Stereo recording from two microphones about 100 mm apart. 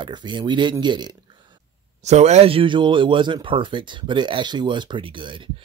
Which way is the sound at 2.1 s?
90° right.